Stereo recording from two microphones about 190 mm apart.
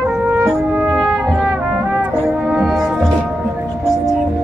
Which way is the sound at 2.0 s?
5° right (ahead or behind).